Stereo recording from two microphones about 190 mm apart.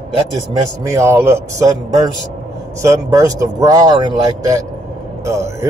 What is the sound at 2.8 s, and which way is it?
Speech, 15° right (ahead or behind).